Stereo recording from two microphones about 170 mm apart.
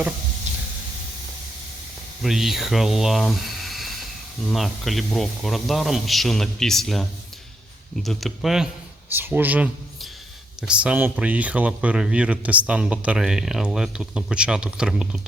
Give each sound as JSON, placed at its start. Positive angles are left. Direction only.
{"t": 0.5, "sound": "hiss", "side_deg": -40}
{"t": 2.2, "sound": "speech", "side_deg": 0}